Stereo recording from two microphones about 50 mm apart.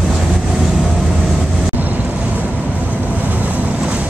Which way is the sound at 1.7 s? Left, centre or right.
Right.